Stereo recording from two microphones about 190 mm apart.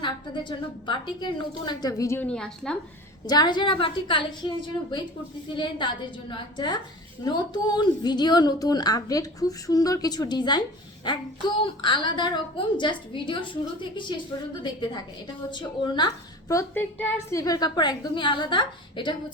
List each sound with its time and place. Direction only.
0.0 s a woman's voice: 25° left (ahead or behind); by 2.7 s 5° left (ahead or behind)
3.2 s a woman's voice: 20° left (ahead or behind)
5.5 s a woman's voice: 25° left (ahead or behind)